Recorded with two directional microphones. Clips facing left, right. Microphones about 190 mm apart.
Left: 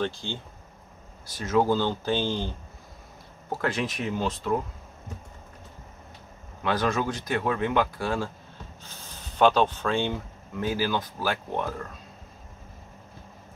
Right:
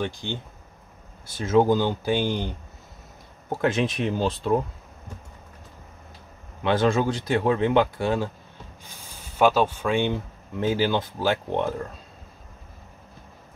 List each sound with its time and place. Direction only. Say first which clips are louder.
0.0 s speech: right 1 dB; 15° right (ahead or behind)
3.6 s speech: right 5 dB; 25° right (ahead or behind)
6.6 s speech: right 5 dB; 25° right (ahead or behind)